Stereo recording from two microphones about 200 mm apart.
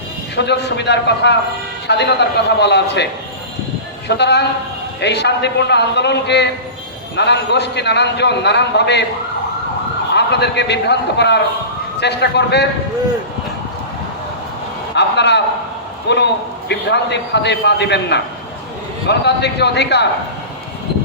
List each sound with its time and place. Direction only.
0.3 s a man's voice: 60° left (ahead or behind)
4.1 s a man's voice: 55° left (ahead or behind)
10.2 s a man's voice: 60° left (ahead or behind)
14.9 s a sound: 60° left (ahead or behind)
16.0 s a man's voice: 60° left (ahead or behind)